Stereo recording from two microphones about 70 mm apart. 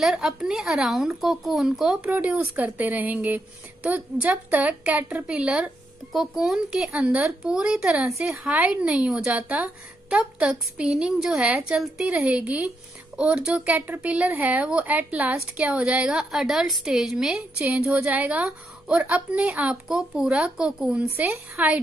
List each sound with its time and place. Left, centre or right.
0.1 s a woman's voice: centre
2.0 s speech: right
6.1 s a woman's voice: centre
11.5 s a woman's voice: centre
13.7 s a woman's voice: right; by 17.4 s centre
17.6 s speech: centre
19.9 s a woman's voice: centre
21.0 s speech: right